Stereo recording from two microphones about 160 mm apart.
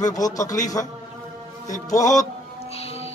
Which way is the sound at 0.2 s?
20° left (ahead or behind).